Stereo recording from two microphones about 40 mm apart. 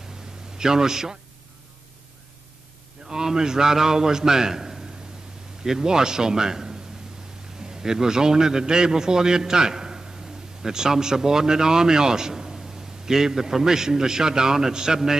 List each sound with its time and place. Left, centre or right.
0.6 s a man's voice: centre
3.1 s a man's voice: centre